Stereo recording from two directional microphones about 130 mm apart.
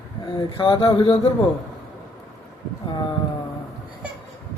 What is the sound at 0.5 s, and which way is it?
Speech, 40° left (ahead or behind).